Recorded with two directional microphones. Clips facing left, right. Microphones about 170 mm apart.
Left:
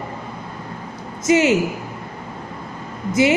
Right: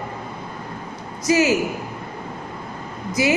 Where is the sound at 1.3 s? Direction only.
25° left (ahead or behind).